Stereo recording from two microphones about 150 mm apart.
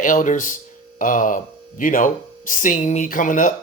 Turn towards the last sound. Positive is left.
turn(degrees=60)  # may be behind; listen again after turning